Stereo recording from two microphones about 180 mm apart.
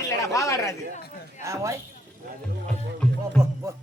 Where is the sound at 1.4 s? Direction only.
15° right (ahead or behind).